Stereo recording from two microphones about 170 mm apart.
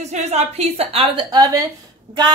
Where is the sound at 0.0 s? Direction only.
40° right (ahead or behind).